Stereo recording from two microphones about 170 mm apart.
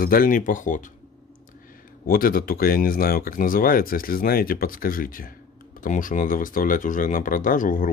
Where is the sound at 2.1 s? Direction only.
60° left (ahead or behind).